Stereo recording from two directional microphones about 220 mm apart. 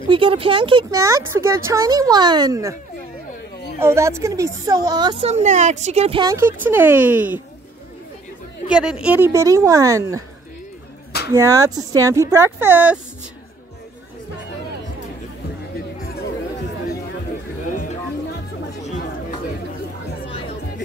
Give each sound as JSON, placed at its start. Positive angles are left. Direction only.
{"t": 0.1, "sound": "speech", "side_deg": -25}
{"t": 3.8, "sound": "speech", "side_deg": -10}
{"t": 5.3, "sound": "speech", "side_deg": -30}
{"t": 8.6, "sound": "speech", "side_deg": -5}
{"t": 11.2, "sound": "speech", "side_deg": -15}